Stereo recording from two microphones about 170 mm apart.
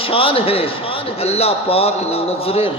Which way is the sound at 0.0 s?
30° left (ahead or behind).